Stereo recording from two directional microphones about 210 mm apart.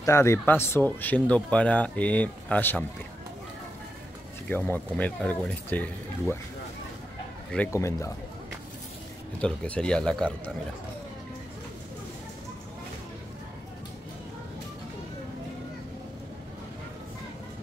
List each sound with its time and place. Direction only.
0.0 s speech: 15° left (ahead or behind)
4.5 s speech: 10° left (ahead or behind)
7.5 s speech: 10° left (ahead or behind)
9.4 s speech: 5° left (ahead or behind)